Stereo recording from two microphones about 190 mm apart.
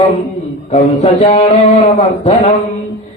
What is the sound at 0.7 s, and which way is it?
A man's voice, 35° left (ahead or behind).